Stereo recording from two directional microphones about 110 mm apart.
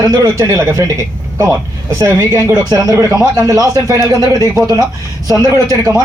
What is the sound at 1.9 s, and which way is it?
Speech, 30° right (ahead or behind).